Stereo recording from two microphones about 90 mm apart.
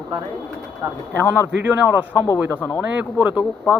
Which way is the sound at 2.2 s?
35° left (ahead or behind).